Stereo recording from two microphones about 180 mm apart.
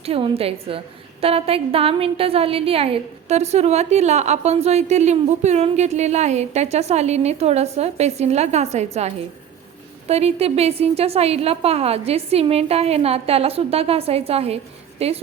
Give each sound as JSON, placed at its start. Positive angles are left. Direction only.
{"t": 0.0, "sound": "a woman's voice", "side_deg": -35}